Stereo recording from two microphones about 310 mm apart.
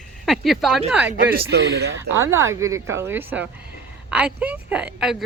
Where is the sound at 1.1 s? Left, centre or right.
Right.